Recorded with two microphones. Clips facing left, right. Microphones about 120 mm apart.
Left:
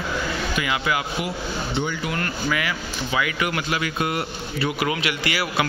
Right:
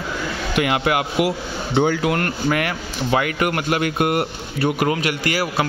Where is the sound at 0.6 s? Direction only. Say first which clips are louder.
Right 7 dB; 60° right (ahead or behind).